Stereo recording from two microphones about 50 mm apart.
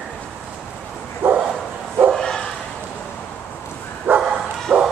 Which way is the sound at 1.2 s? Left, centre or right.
Right.